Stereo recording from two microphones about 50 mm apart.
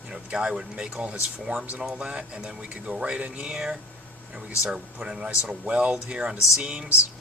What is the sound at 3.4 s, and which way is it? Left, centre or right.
Speech, centre.